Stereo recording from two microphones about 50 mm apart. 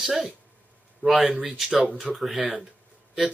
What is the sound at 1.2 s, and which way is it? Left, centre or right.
Speech, right.